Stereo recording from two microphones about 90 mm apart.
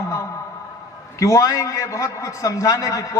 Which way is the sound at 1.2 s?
35° left (ahead or behind).